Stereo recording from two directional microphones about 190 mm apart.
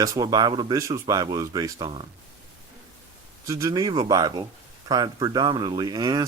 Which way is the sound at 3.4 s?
15° right (ahead or behind).